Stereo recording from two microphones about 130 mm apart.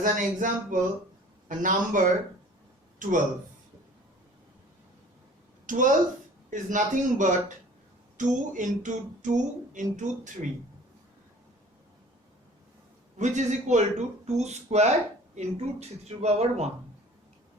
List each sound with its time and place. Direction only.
0.0 s a man's voice: 90° right
5.6 s speech: 85° right
8.2 s a sound: 75° right (ahead or behind)
13.1 s speech: 65° right (ahead or behind)